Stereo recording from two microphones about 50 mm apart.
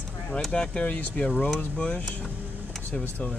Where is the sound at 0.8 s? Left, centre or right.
Left.